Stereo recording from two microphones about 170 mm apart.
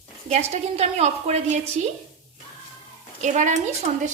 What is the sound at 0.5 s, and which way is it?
A woman's voice, 40° right (ahead or behind).